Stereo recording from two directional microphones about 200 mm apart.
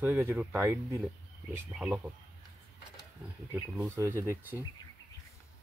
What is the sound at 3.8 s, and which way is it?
Speech, 15° right (ahead or behind).